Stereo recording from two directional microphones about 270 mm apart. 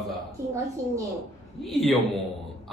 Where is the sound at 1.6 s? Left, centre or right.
Centre.